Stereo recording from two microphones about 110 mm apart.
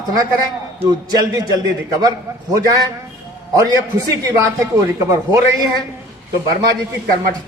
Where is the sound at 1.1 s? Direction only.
35° right (ahead or behind).